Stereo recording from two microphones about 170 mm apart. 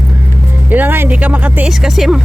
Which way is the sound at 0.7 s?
10° right (ahead or behind).